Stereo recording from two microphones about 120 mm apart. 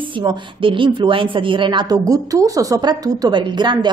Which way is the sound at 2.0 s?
30° right (ahead or behind).